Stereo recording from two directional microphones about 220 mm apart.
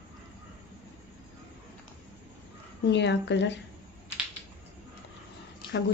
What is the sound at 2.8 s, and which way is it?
Speech, 50° left (ahead or behind).